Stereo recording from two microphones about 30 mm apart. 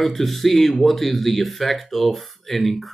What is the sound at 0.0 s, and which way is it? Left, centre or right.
Speech, centre.